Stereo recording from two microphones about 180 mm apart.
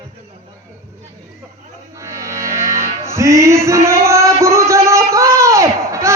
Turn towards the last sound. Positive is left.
turn(degrees=-15)  # may be behind; listen again after turning